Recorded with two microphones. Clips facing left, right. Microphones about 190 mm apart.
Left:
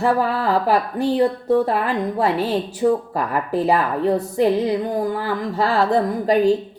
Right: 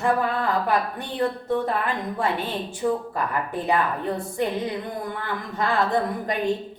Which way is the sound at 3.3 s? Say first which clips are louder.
Left 7 dB; 35° left (ahead or behind).